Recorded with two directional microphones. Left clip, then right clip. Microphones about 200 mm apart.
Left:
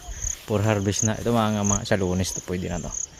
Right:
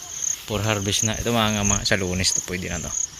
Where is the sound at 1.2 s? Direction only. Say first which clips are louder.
Left 1 dB; 15° left (ahead or behind).